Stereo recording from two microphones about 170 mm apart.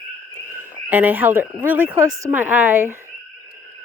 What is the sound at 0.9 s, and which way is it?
Speech, 10° right (ahead or behind).